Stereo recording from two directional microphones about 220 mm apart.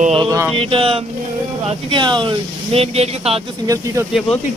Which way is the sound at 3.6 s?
15° right (ahead or behind).